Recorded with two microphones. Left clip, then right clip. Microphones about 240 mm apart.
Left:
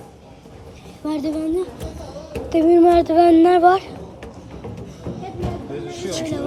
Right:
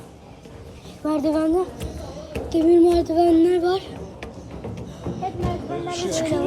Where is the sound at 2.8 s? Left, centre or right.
Centre.